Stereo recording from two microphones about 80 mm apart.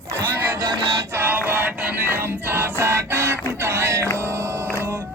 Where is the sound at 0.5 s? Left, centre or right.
Right.